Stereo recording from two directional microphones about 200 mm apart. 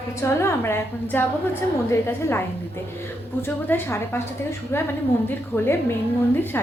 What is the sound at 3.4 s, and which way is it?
A woman's voice, 10° left (ahead or behind).